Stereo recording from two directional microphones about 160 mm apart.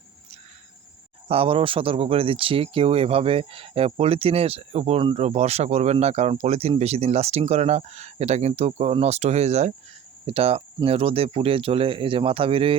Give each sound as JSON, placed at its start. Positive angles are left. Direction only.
{"t": 1.3, "sound": "speech", "side_deg": -35}